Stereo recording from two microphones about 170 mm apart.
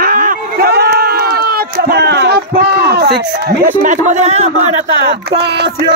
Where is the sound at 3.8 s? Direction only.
45° right (ahead or behind).